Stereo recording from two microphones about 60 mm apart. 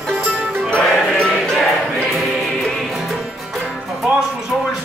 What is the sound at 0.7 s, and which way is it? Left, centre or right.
Music, centre.